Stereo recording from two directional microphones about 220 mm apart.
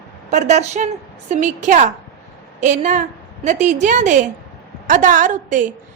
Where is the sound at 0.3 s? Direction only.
30° right (ahead or behind).